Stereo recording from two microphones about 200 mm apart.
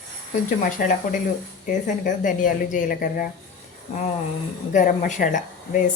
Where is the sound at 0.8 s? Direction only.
45° left (ahead or behind).